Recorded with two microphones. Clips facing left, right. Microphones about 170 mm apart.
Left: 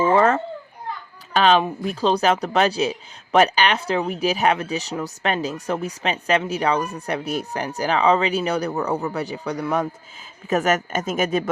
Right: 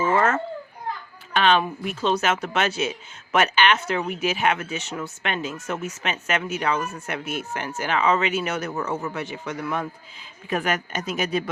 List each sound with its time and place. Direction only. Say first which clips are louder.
0.0 s children playing: left 4 dB; 30° left (ahead or behind)
1.3 s speech: left 3 dB; 35° left (ahead or behind)